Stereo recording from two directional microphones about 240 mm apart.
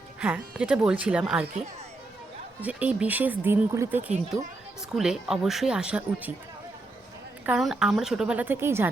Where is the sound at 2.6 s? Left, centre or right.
Centre.